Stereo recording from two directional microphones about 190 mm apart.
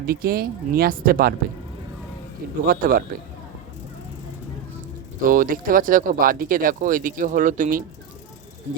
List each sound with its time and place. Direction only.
0.0 s speech: 50° right (ahead or behind)
2.6 s speech: 50° right (ahead or behind)
5.2 s speech: 45° right (ahead or behind)